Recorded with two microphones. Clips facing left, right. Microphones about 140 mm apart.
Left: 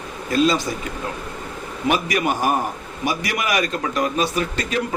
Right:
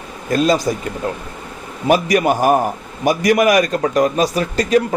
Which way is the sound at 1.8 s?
40° right (ahead or behind).